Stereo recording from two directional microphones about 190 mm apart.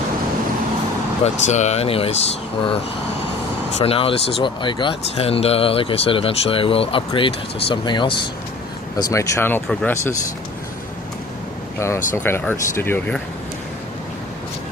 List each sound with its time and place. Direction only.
1.2 s speech: 35° left (ahead or behind)
3.8 s speech: 30° left (ahead or behind); by 10.2 s 15° left (ahead or behind)
11.8 s speech: 15° left (ahead or behind)